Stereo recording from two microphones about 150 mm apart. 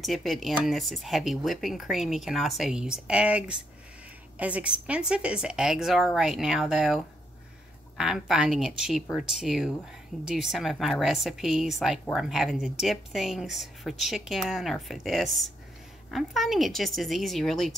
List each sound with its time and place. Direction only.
0.0 s speech: centre (ahead or behind)
8.0 s speech: 5° right (ahead or behind)